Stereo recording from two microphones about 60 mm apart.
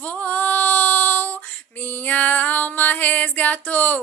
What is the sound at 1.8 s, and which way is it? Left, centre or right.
Music, left.